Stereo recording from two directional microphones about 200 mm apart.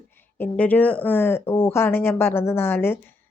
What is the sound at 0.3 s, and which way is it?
A woman's voice, 10° left (ahead or behind).